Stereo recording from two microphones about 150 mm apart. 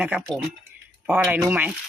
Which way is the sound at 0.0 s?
10° right (ahead or behind).